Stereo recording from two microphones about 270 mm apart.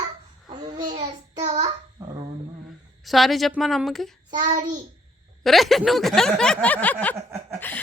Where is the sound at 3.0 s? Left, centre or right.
Centre.